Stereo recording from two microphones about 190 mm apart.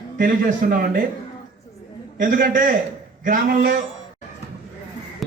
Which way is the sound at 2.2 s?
45° right (ahead or behind).